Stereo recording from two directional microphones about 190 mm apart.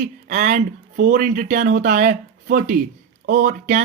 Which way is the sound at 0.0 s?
40° right (ahead or behind).